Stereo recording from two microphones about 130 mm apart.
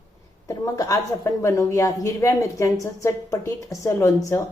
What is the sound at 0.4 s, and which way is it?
A woman's voice, 25° left (ahead or behind).